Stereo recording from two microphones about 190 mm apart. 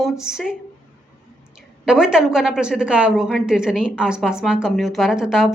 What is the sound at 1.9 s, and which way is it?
Speech, 5° right (ahead or behind).